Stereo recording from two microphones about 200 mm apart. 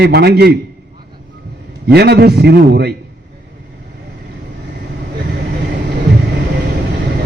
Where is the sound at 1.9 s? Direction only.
55° right (ahead or behind).